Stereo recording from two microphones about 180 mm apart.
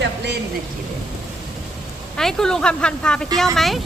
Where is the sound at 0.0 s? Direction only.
70° right (ahead or behind).